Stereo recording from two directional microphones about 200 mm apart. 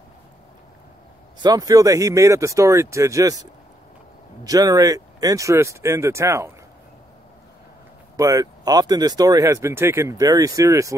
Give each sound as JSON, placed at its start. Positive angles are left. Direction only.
{"t": 1.4, "sound": "speech", "side_deg": -20}
{"t": 4.5, "sound": "speech", "side_deg": -20}
{"t": 8.2, "sound": "speech", "side_deg": -15}